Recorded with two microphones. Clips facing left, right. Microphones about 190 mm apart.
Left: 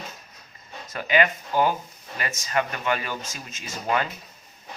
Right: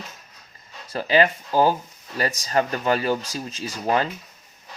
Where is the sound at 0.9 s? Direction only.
35° right (ahead or behind).